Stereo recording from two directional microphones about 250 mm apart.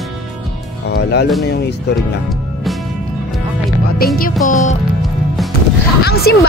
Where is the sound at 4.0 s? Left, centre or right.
Left.